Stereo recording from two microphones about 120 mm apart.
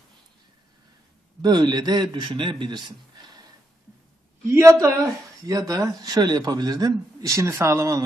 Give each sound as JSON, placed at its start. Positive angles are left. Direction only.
{"t": 1.4, "sound": "a man's voice", "side_deg": -35}
{"t": 4.5, "sound": "a man's voice", "side_deg": -25}